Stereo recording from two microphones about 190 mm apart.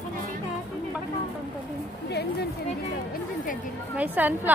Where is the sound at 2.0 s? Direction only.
60° left (ahead or behind).